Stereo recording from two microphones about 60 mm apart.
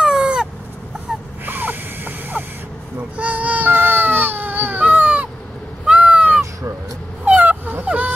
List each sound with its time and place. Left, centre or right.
0.0 s a sound: centre
1.4 s snort: right
3.2 s child singing: right
3.7 s baby cry: right
5.9 s crow: right
7.2 s dog: right